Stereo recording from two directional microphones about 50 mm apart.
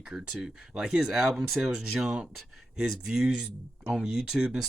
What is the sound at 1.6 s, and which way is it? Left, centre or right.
Speech, centre.